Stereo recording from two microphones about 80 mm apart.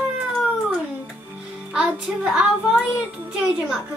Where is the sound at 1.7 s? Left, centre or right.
Centre.